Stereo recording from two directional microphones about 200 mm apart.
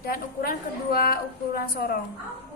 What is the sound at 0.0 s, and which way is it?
A woman's voice, 45° left (ahead or behind).